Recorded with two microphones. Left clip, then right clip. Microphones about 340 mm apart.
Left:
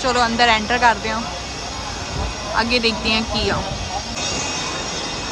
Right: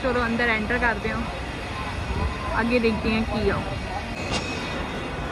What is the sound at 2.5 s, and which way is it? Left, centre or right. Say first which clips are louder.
Speech: left 4 dB; centre.